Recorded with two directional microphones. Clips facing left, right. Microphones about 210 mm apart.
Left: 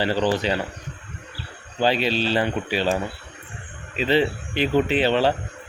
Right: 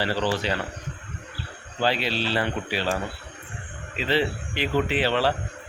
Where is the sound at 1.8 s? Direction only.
15° left (ahead or behind).